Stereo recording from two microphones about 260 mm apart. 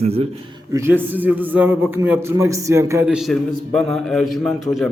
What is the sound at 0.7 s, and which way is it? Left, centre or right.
A man's voice, centre.